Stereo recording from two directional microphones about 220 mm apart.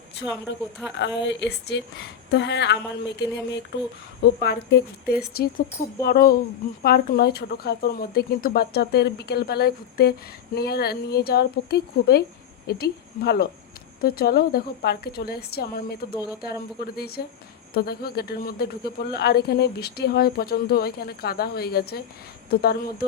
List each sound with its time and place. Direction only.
0.5 s speech: 55° left (ahead or behind)